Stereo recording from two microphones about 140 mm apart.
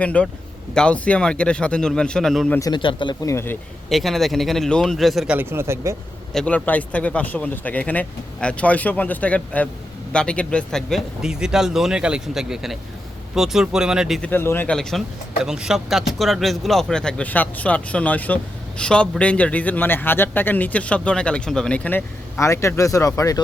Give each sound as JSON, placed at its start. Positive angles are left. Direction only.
{"t": 0.0, "sound": "a man's voice", "side_deg": 10}
{"t": 2.6, "sound": "speech", "side_deg": 30}
{"t": 3.2, "sound": "a man's voice", "side_deg": 15}
{"t": 3.8, "sound": "speech", "side_deg": 0}
{"t": 6.3, "sound": "a man's voice", "side_deg": 10}
{"t": 14.2, "sound": "a man's voice", "side_deg": 15}